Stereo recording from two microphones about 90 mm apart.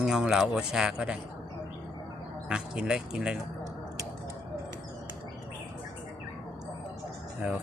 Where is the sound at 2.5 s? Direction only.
10° right (ahead or behind).